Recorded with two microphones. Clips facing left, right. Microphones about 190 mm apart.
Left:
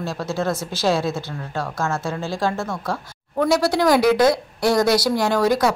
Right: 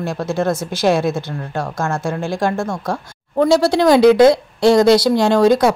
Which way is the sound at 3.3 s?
25° right (ahead or behind).